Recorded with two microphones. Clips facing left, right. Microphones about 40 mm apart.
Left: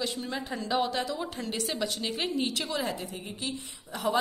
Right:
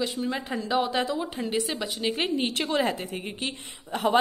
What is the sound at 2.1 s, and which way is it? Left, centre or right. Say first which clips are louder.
A woman's voice: right 3 dB; right.